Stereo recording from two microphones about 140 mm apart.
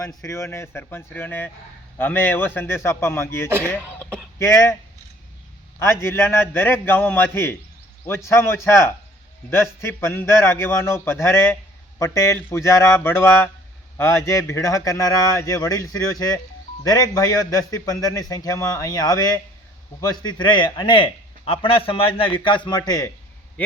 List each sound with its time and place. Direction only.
0.0 s a man's voice: 25° left (ahead or behind)
5.8 s a man's voice: 20° left (ahead or behind)